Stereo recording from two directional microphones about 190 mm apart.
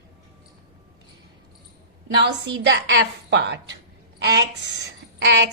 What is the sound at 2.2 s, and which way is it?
A woman's voice, 65° right (ahead or behind).